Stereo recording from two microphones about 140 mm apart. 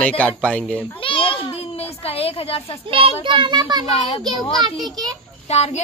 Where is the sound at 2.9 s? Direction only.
40° right (ahead or behind).